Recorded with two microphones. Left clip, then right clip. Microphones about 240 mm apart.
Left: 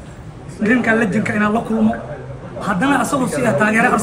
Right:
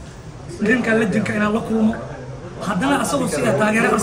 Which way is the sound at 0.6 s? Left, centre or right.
Centre.